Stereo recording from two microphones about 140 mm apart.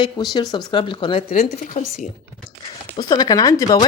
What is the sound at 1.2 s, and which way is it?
Speech, 90° left.